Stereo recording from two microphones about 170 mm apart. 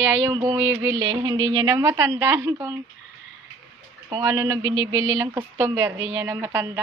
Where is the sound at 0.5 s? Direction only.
15° right (ahead or behind).